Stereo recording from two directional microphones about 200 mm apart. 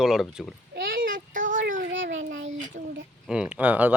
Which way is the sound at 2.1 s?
75° right (ahead or behind).